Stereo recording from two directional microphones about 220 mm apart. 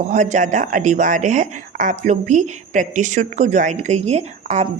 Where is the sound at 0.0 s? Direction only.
35° right (ahead or behind).